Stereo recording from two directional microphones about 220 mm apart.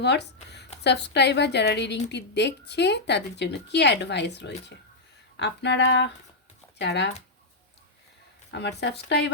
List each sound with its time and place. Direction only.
0.0 s a woman's voice: 50° left (ahead or behind)
8.4 s a woman's voice: 50° left (ahead or behind)